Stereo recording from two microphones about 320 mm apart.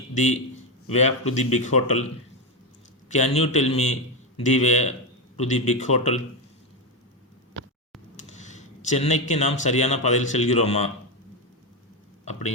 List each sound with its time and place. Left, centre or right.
0.1 s a man's voice: left
3.1 s speech: left
8.3 s speech: left
12.2 s speech: left